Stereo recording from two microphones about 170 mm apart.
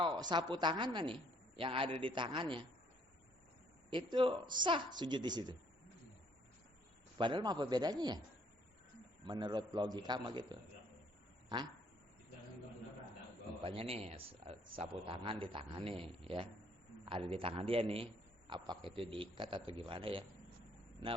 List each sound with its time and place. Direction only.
0.0 s a woman's voice: 25° right (ahead or behind)
3.8 s a woman's voice: 30° right (ahead or behind)
7.2 s a woman's voice: 25° right (ahead or behind)
9.2 s a woman's voice: 25° right (ahead or behind)
13.7 s a man's voice: 35° right (ahead or behind)